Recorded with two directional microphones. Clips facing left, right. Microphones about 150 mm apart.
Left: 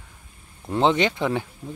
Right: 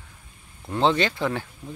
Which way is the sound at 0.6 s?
15° left (ahead or behind).